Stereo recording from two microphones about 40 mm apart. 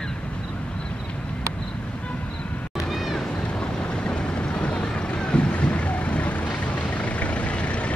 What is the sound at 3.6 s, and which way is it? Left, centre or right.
Vehicle, left.